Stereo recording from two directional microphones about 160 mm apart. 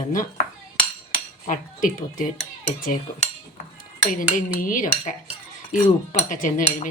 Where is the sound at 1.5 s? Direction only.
55° left (ahead or behind).